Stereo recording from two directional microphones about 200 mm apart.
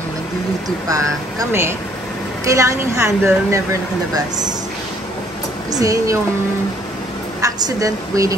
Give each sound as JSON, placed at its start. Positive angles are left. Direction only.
{"t": 0.8, "sound": "a woman's voice", "side_deg": -15}
{"t": 5.7, "sound": "a woman's voice", "side_deg": -15}
{"t": 7.4, "sound": "a woman's voice", "side_deg": -15}